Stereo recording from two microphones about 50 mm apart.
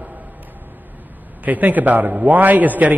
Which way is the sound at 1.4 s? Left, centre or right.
Right.